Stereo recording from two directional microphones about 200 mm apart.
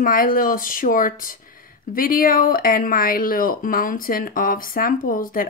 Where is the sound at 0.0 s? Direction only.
45° left (ahead or behind).